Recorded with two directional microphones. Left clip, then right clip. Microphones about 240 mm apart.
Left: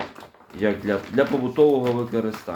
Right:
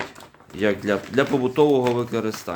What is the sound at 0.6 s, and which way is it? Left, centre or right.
Speech, right.